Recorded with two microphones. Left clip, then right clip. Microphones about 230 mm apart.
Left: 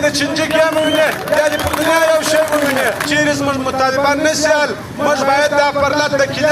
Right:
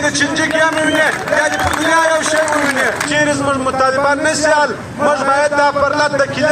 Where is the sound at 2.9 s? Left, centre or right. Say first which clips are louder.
Even; left.